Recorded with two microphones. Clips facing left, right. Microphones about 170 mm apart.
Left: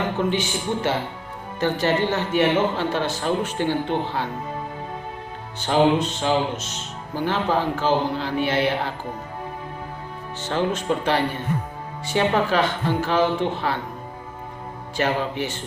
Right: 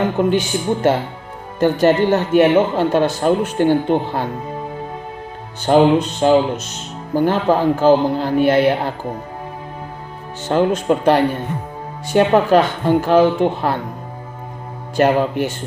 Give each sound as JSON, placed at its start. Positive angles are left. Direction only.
{"t": 0.3, "sound": "speech", "side_deg": -50}
{"t": 5.6, "sound": "speech", "side_deg": -45}
{"t": 10.5, "sound": "speech", "side_deg": -55}
{"t": 14.9, "sound": "speech", "side_deg": -50}